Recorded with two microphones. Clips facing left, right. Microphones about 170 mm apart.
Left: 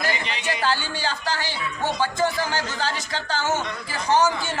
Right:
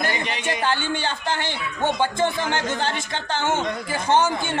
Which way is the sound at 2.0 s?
25° right (ahead or behind).